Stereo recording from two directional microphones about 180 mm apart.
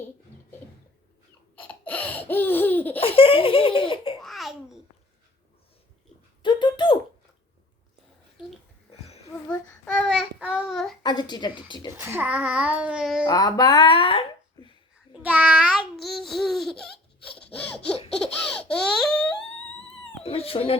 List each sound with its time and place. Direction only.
1.5 s laughter: 10° left (ahead or behind)
3.0 s laughter: 30° left (ahead or behind)
4.2 s babbling: centre (ahead or behind)
6.4 s a sound: 25° left (ahead or behind)
9.8 s child singing: 5° left (ahead or behind)
11.0 s a woman's voice: 25° left (ahead or behind)
11.9 s a child's voice: 15° right (ahead or behind)
13.2 s speech: 20° left (ahead or behind)
15.1 s babbling: 5° right (ahead or behind)
17.3 s sawing: 5° left (ahead or behind)
18.2 s baby laughter: 5° left (ahead or behind)
20.2 s cat: 30° left (ahead or behind)